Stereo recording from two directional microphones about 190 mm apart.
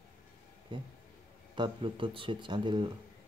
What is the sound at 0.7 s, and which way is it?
Speech, 25° right (ahead or behind).